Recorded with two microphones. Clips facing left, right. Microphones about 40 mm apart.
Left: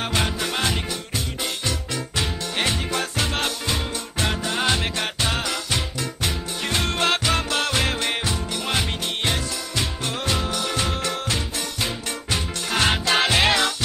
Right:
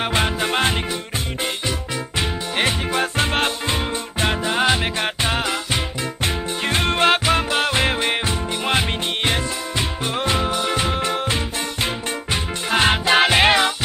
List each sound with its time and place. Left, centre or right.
0.0 s music: right
2.1 s music: right